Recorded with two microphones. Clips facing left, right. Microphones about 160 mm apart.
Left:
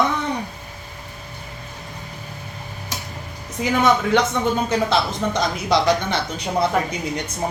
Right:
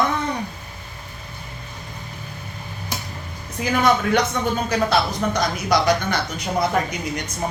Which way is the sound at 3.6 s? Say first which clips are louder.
Left 1 dB; 25° left (ahead or behind).